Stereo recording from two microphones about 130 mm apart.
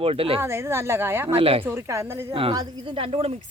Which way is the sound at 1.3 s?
45° right (ahead or behind).